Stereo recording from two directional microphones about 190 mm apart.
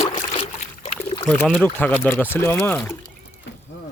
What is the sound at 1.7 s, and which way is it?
Speech, 10° left (ahead or behind).